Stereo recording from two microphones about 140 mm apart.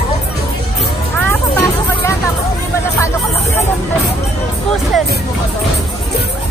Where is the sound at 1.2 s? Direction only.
15° left (ahead or behind).